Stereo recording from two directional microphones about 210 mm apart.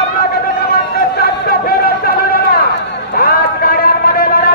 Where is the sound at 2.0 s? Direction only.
45° left (ahead or behind).